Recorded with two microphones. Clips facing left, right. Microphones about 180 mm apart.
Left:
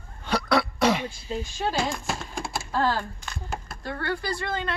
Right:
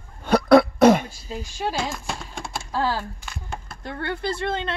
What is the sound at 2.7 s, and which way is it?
Speech, 10° right (ahead or behind).